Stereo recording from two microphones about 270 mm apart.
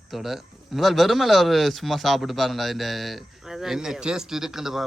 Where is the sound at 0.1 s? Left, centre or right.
Centre.